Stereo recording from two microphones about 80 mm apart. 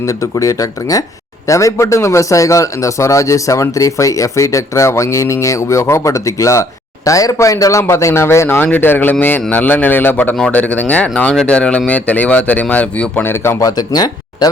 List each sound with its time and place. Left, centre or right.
0.0 s a man's voice: left; by 13.3 s centre
13.3 s a man's voice: left
13.7 s speech: left